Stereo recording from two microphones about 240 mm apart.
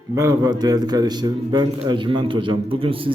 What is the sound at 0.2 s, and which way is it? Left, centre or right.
A man's voice, centre.